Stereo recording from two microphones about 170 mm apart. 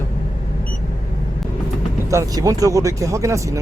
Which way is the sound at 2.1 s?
20° right (ahead or behind).